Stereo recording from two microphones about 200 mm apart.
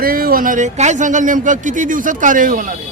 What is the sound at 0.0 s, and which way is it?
Speech, 45° right (ahead or behind).